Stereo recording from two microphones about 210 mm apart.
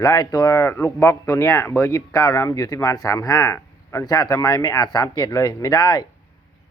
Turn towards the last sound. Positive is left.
turn(degrees=20)  # may be behind; listen again after turning